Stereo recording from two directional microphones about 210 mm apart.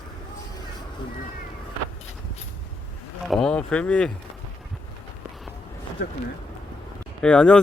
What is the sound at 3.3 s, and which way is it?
Speech, 5° left (ahead or behind).